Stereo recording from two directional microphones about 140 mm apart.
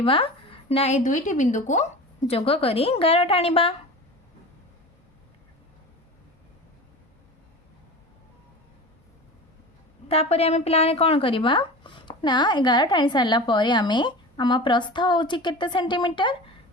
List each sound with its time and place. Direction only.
0.0 s a woman's voice: 40° left (ahead or behind)
10.1 s speech: 45° left (ahead or behind)